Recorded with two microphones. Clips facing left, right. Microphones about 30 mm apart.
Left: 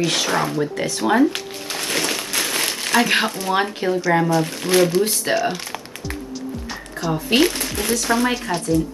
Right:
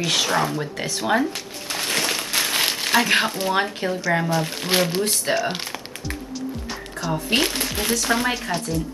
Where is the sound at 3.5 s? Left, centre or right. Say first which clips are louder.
Left 3 dB; centre.